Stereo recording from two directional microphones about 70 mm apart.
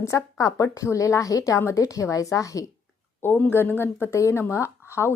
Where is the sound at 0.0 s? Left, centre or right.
Left.